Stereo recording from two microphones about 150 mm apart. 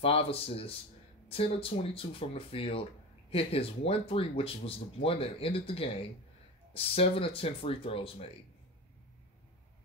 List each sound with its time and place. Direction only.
0.0 s speech: 40° left (ahead or behind)